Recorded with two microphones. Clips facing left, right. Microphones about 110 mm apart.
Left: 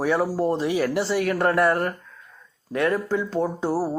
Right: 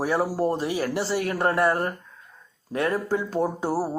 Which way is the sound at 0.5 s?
35° right (ahead or behind).